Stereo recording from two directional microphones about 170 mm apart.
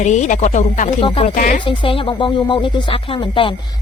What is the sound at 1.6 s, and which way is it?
Speech, 30° left (ahead or behind).